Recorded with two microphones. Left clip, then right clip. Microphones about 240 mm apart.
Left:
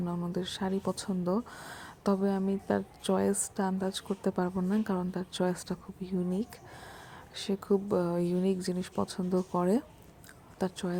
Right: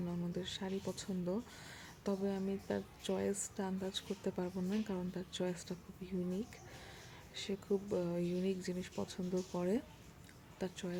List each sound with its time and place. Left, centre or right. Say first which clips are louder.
0.1 s speech: left 7 dB; centre